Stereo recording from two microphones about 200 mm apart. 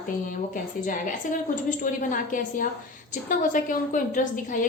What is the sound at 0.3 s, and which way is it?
A woman's voice, 40° left (ahead or behind).